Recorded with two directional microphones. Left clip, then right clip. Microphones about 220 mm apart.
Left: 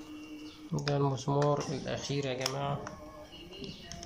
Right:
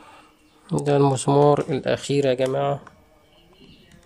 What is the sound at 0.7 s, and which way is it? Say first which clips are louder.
Speech: right 13 dB; 50° right (ahead or behind).